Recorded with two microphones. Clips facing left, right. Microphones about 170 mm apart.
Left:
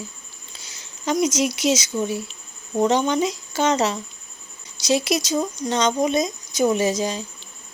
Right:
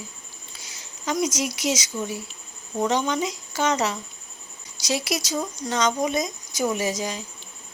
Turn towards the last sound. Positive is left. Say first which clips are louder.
# left 5 dB
turn(degrees=25)  # may be behind; listen again after turning